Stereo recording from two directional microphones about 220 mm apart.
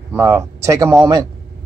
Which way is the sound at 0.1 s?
10° right (ahead or behind).